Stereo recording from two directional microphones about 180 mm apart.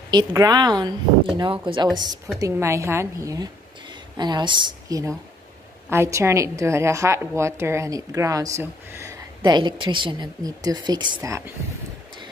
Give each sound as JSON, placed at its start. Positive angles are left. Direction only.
{"t": 0.1, "sound": "a woman's voice", "side_deg": -20}
{"t": 2.3, "sound": "a woman's voice", "side_deg": -15}
{"t": 11.1, "sound": "a woman's voice", "side_deg": -15}